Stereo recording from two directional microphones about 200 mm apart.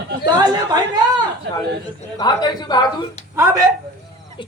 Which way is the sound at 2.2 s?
20° left (ahead or behind).